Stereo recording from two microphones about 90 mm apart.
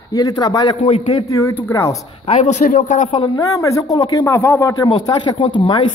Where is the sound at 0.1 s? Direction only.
50° left (ahead or behind).